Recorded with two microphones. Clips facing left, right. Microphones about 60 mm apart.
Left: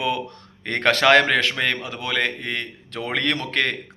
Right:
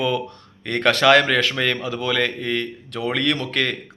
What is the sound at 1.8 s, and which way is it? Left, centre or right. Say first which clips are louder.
Speech: right 3 dB; left.